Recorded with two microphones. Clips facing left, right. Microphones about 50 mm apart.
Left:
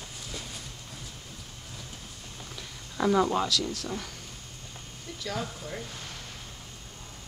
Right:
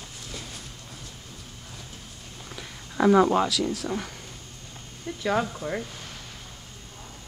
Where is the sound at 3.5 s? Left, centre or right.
Centre.